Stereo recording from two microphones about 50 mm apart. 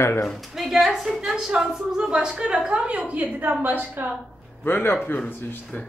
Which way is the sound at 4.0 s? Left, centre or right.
Right.